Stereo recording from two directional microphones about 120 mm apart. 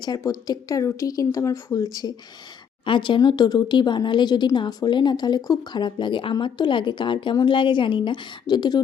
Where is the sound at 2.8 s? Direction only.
45° left (ahead or behind).